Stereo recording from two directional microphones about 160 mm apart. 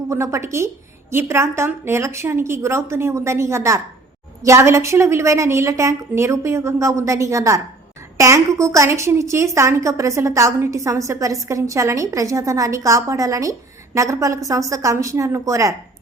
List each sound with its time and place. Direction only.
0.1 s a woman's voice: 20° right (ahead or behind)